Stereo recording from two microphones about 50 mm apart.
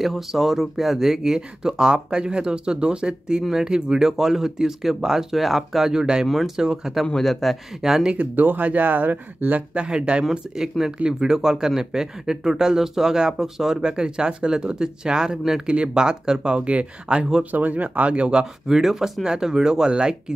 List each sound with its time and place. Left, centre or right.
0.0 s speech: centre
5.9 s speech: centre
6.2 s speech: centre
7.2 s a man's voice: centre
7.8 s speech: centre
8.4 s speech: right
9.8 s speech: centre
17.5 s speech: right; by 20.3 s centre